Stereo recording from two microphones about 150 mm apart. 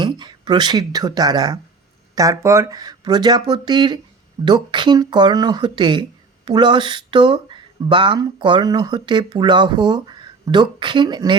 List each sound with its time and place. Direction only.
0.0 s speech: 30° right (ahead or behind)